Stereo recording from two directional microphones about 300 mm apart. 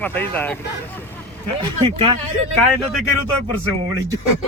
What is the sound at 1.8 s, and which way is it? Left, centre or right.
Speech, centre.